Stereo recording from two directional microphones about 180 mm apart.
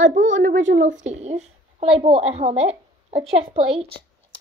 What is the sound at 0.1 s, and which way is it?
Speech, 40° right (ahead or behind).